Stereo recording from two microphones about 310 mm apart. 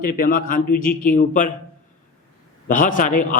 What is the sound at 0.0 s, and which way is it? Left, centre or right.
Speech, left.